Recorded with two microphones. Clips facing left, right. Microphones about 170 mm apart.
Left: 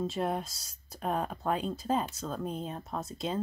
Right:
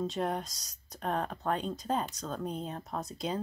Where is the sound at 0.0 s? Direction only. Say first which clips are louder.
Left 1 dB; 5° left (ahead or behind).